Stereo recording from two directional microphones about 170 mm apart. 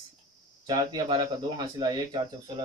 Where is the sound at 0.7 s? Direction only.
25° right (ahead or behind).